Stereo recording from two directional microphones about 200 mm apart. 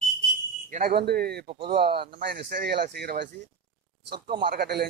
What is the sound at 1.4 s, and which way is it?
Speech, 30° right (ahead or behind).